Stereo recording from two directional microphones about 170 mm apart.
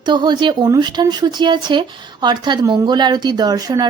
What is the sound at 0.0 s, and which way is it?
Speech, 25° right (ahead or behind).